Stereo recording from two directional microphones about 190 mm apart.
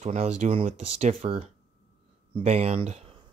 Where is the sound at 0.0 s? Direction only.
40° right (ahead or behind).